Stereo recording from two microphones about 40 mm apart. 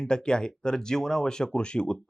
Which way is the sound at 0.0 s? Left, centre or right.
Left.